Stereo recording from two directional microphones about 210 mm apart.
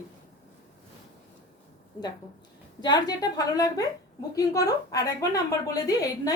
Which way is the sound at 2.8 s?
20° left (ahead or behind).